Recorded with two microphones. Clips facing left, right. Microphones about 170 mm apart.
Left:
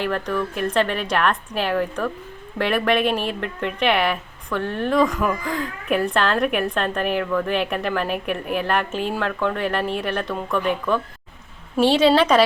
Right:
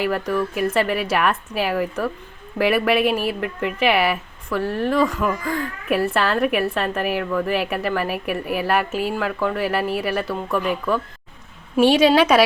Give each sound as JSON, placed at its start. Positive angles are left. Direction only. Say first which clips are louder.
{"t": 0.0, "sound": "speech", "louder": "right 2 dB", "side_deg": -10}